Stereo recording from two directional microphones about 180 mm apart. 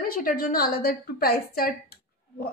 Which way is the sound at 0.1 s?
55° left (ahead or behind).